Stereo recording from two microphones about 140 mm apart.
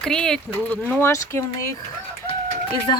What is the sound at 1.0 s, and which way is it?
Speech, 20° left (ahead or behind).